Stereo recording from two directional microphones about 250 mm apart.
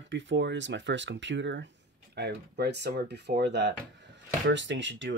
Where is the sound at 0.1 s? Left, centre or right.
Right.